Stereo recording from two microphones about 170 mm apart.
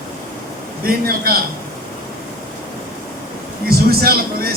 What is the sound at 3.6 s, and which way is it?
Speech, 65° right (ahead or behind).